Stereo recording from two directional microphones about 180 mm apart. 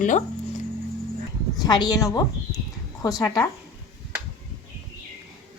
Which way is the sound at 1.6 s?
20° left (ahead or behind).